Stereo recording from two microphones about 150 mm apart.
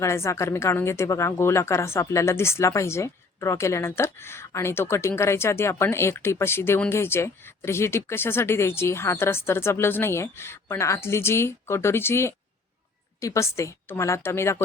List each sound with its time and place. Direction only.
0.0 s speech: 20° left (ahead or behind)